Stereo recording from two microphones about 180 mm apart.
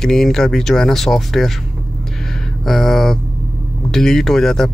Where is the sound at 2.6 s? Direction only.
Centre (ahead or behind).